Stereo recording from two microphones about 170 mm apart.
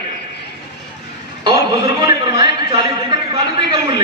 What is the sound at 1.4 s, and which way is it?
A man's voice, 25° right (ahead or behind).